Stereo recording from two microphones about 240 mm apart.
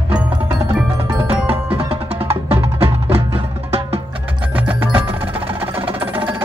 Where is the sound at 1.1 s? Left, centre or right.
Right.